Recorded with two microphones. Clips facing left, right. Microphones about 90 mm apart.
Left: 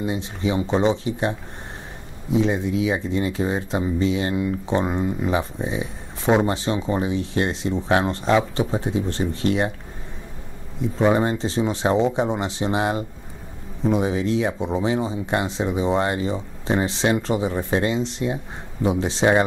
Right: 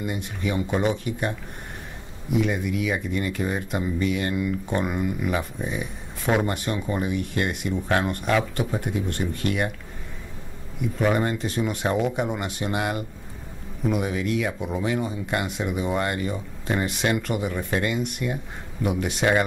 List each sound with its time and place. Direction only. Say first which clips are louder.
0.7 s speech: left 4 dB; 25° left (ahead or behind)
2.3 s speech: left 3 dB; 25° left (ahead or behind)
10.8 s speech: left 4 dB; 25° left (ahead or behind)